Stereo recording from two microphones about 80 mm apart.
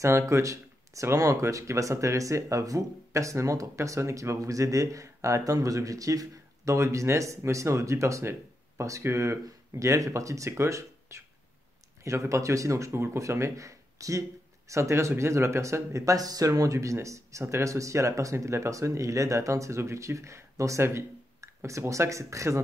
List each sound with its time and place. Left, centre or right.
0.0 s speech: right